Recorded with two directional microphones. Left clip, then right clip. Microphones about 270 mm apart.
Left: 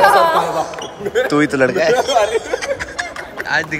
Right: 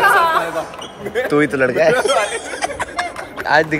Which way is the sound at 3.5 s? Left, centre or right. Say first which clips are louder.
Right 4 dB; centre.